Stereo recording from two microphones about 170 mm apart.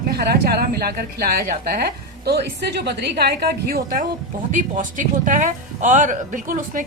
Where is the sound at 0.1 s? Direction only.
70° right (ahead or behind).